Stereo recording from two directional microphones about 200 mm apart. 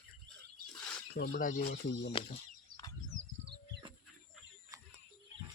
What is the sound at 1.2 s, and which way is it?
Speech, 50° left (ahead or behind).